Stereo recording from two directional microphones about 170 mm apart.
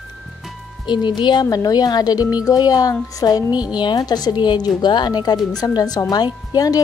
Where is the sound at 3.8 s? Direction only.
25° left (ahead or behind).